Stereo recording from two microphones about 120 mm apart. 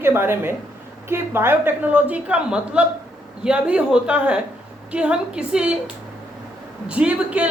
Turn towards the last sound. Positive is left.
turn(degrees=-10)  # may be behind; listen again after turning